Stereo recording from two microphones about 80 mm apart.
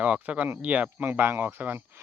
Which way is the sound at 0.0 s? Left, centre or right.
Centre.